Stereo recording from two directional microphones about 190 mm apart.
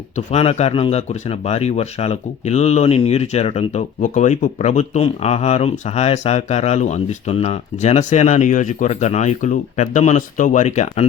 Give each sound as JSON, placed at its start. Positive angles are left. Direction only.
{"t": 0.2, "sound": "speech", "side_deg": 35}